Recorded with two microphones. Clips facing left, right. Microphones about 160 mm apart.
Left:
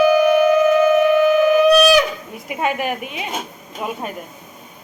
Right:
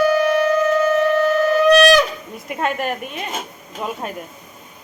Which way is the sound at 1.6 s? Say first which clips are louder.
Right 4 dB; 5° left (ahead or behind).